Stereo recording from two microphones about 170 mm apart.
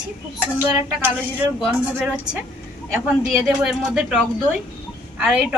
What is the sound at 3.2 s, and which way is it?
Speech, centre (ahead or behind).